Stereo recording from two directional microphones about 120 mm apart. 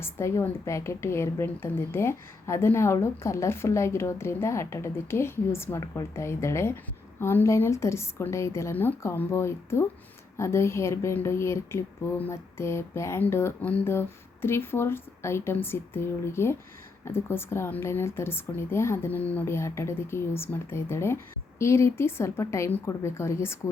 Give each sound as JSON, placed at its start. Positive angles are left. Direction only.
{"t": 0.0, "sound": "a woman's voice", "side_deg": 20}